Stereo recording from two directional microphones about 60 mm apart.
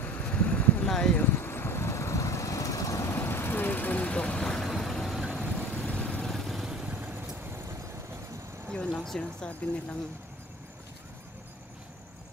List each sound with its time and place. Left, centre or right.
0.0 s vehicle: left
0.8 s a sound: centre
1.1 s vehicle: left
3.1 s vehicle: left; by 5.9 s centre
5.9 s vehicle: centre
6.2 s vehicle: centre
6.9 s vehicle: right
8.7 s speech: centre